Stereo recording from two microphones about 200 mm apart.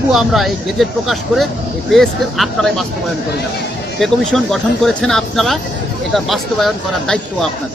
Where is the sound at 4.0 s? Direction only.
Centre (ahead or behind).